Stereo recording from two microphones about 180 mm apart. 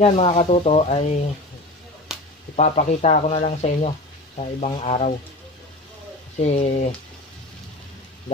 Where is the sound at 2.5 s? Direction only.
40° left (ahead or behind).